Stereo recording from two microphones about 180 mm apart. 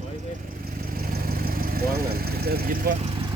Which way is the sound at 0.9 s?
55° right (ahead or behind).